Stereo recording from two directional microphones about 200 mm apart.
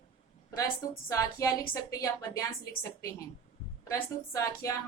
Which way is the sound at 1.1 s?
15° left (ahead or behind).